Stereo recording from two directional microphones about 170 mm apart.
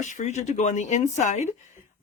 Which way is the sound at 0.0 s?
45° left (ahead or behind).